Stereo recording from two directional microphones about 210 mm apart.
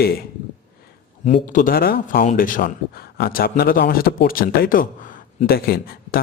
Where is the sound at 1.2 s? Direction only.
35° left (ahead or behind).